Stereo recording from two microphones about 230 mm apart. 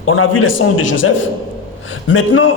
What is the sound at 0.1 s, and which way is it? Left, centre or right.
A man's voice, left.